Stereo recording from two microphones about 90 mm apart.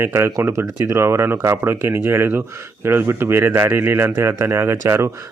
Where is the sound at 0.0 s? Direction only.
30° right (ahead or behind).